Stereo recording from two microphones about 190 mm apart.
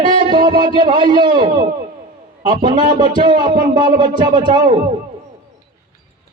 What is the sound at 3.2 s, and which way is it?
Speech, 25° right (ahead or behind).